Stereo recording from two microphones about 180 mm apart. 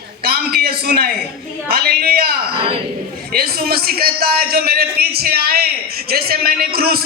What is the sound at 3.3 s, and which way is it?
A man's voice, 55° right (ahead or behind).